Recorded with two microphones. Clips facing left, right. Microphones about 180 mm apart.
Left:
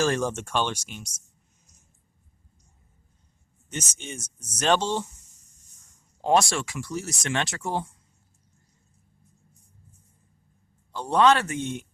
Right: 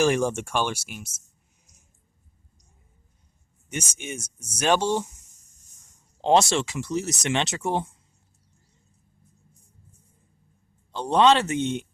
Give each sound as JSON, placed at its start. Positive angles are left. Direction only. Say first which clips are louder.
{"t": 0.0, "sound": "speech", "louder": "right 3 dB", "side_deg": -15}
{"t": 3.7, "sound": "speech", "louder": "right 3 dB", "side_deg": -10}
{"t": 6.2, "sound": "speech", "louder": "right 2 dB", "side_deg": -25}
{"t": 10.9, "sound": "speech", "louder": "right 1 dB", "side_deg": -20}